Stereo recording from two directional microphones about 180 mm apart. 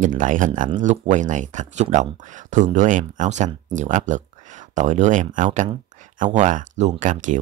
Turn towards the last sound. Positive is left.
turn(degrees=-45)  # may be behind; listen again after turning